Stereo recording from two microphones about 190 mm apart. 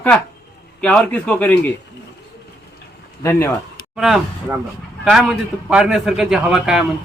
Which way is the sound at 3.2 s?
15° left (ahead or behind).